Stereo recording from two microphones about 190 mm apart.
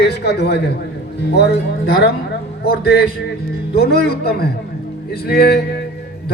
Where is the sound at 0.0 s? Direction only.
60° left (ahead or behind).